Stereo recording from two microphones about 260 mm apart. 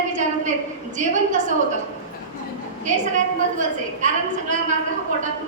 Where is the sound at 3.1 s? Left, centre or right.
Right.